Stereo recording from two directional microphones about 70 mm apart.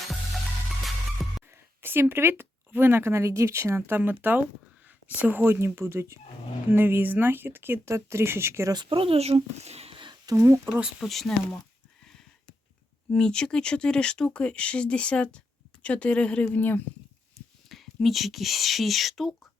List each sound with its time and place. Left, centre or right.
0.9 s music: centre
1.5 s speech: right
5.5 s speech: right
6.7 s speech: right
9.3 s a child's voice: right
10.3 s speech: right
10.7 s speech: centre
11.0 s speech: centre
13.1 s speech: centre; by 16.8 s left
17.7 s speech: centre